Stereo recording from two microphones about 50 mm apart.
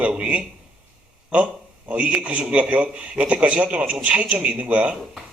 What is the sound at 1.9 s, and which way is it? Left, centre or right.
A man's voice, right.